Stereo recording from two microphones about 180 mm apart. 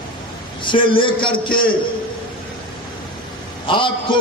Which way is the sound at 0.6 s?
30° left (ahead or behind).